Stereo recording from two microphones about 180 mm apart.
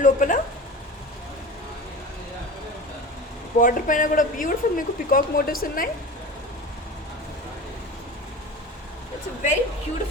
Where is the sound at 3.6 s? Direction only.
50° left (ahead or behind).